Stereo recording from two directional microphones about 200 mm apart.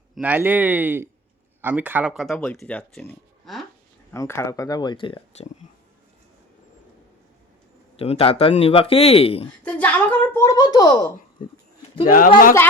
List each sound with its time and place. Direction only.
0.2 s speech: 10° right (ahead or behind)
4.1 s speech: 15° left (ahead or behind)
7.9 s speech: 30° left (ahead or behind)
9.6 s a woman's voice: 5° left (ahead or behind)
12.0 s speech: 45° left (ahead or behind)